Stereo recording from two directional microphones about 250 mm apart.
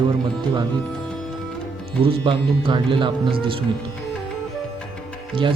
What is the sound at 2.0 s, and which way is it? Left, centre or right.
Speech, right.